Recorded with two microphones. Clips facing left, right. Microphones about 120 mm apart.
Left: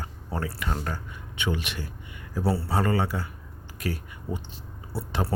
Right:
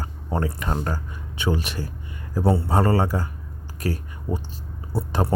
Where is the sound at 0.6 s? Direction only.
35° right (ahead or behind).